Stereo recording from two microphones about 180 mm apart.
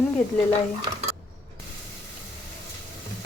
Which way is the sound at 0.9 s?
25° right (ahead or behind).